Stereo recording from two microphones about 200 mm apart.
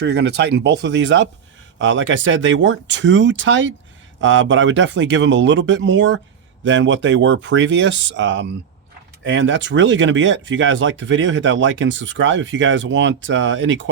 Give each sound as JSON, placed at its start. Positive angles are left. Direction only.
{"t": 0.0, "sound": "speech", "side_deg": -55}